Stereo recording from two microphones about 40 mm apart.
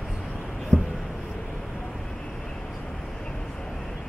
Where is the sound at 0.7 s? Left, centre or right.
Left.